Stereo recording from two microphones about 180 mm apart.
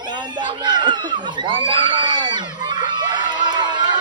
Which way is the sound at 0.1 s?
25° right (ahead or behind).